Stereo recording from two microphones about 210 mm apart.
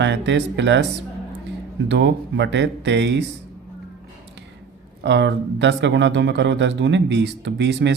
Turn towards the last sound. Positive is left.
turn(degrees=-55)  # may be behind; listen again after turning